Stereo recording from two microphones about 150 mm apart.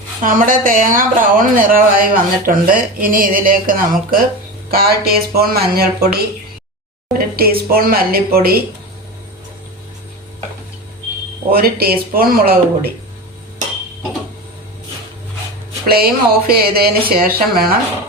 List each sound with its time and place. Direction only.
0.2 s speech: 65° right (ahead or behind)
4.7 s speech: 90° right
11.5 s speech: 85° right
15.9 s speech: 90° right